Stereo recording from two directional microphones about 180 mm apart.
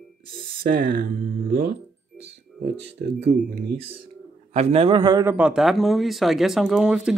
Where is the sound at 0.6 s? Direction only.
50° right (ahead or behind).